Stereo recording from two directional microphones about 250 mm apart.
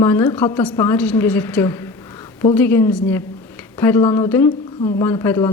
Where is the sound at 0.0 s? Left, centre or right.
Centre.